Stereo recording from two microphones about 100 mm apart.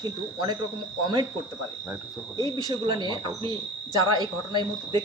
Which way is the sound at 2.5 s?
50° right (ahead or behind).